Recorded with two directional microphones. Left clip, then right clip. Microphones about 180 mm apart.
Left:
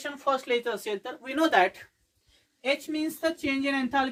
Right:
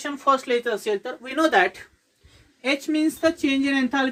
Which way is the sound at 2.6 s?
20° left (ahead or behind).